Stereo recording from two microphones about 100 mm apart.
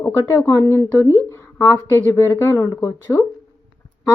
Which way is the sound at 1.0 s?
30° right (ahead or behind).